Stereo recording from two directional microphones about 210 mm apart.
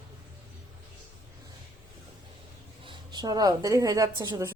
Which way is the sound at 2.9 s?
20° right (ahead or behind).